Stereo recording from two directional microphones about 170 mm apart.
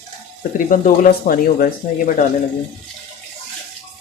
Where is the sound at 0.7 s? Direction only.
55° left (ahead or behind).